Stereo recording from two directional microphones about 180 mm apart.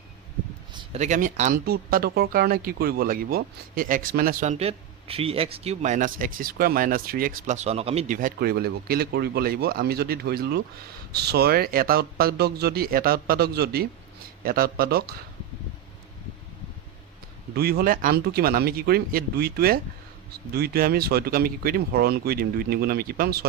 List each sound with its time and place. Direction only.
0.9 s a man's voice: 40° right (ahead or behind)
1.7 s speech: 60° right (ahead or behind)
4.5 s a man's voice: 35° right (ahead or behind); by 15.1 s 60° right (ahead or behind)
17.5 s speech: 60° right (ahead or behind)